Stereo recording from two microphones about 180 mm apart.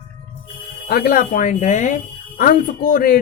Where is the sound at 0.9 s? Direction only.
55° left (ahead or behind).